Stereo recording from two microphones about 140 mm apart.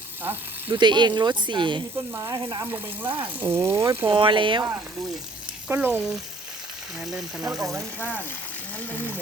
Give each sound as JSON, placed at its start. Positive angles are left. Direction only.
{"t": 0.2, "sound": "speech", "side_deg": -15}
{"t": 0.8, "sound": "speech", "side_deg": -35}
{"t": 2.1, "sound": "speech", "side_deg": -25}
{"t": 2.7, "sound": "speech", "side_deg": -15}
{"t": 4.1, "sound": "speech", "side_deg": -35}
{"t": 5.6, "sound": "speech", "side_deg": -15}
{"t": 7.0, "sound": "speech", "side_deg": -5}
{"t": 7.5, "sound": "speech", "side_deg": -25}
{"t": 8.9, "sound": "speech", "side_deg": 10}